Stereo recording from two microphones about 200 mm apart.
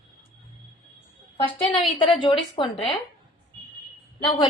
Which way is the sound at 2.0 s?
25° left (ahead or behind).